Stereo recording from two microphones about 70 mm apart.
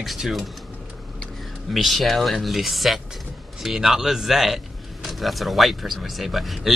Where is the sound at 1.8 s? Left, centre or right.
Centre.